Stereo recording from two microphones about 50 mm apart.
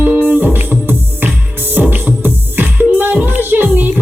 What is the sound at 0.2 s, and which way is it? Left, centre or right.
Music, right.